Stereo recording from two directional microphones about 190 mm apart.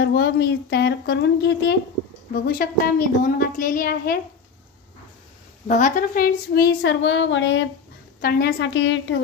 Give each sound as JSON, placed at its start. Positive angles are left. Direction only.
{"t": 0.0, "sound": "speech", "side_deg": 60}
{"t": 2.3, "sound": "a woman's voice", "side_deg": 50}
{"t": 5.7, "sound": "a woman's voice", "side_deg": 40}
{"t": 8.2, "sound": "a woman's voice", "side_deg": 55}